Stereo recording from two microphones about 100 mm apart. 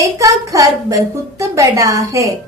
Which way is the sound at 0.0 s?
35° right (ahead or behind).